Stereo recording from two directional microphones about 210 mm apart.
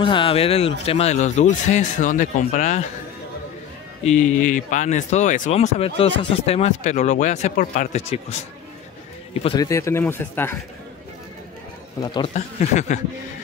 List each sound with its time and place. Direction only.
0.0 s speech: 25° left (ahead or behind)
4.0 s speech: 35° left (ahead or behind)
9.4 s speech: 20° left (ahead or behind)
12.0 s speech: 20° left (ahead or behind)